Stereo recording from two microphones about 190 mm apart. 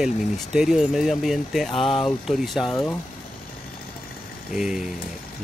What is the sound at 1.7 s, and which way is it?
Speech, 25° left (ahead or behind).